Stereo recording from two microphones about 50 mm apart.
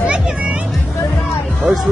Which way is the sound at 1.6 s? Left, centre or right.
Centre.